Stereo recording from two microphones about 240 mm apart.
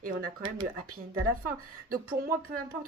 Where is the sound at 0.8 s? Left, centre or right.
Right.